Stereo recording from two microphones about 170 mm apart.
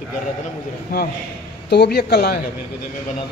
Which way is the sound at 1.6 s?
80° left.